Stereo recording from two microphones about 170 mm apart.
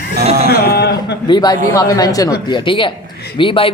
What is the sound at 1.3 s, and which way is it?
Speech, 25° left (ahead or behind).